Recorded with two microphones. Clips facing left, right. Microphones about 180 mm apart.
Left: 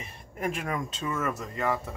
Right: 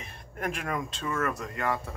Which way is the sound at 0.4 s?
Centre (ahead or behind).